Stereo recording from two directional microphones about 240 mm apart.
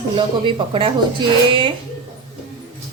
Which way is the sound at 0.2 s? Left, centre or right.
Right.